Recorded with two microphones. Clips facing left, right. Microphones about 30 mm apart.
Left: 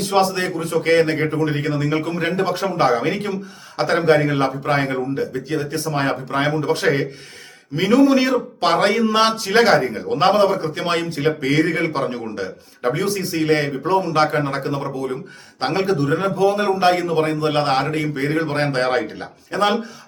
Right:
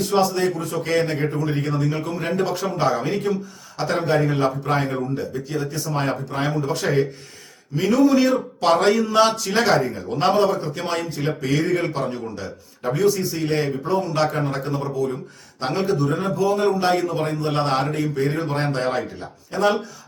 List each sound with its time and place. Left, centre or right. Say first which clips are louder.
0.1 s a man's voice: left 2 dB; left
7.8 s a man's voice: left 2 dB; left
18.8 s speech: left 6 dB; left
19.5 s a man's voice: left 1 dB; left